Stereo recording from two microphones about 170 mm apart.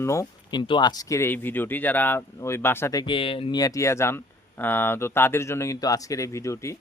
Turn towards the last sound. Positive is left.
turn(degrees=15)  # may be behind; listen again after turning